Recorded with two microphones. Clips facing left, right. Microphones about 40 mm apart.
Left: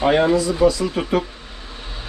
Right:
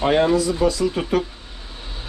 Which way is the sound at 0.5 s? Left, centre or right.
Left.